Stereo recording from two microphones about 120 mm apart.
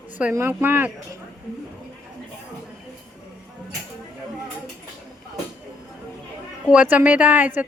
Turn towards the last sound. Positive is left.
turn(degrees=-15)  # may be behind; listen again after turning